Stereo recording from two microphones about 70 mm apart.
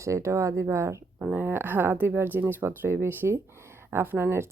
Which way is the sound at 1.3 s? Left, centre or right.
Right.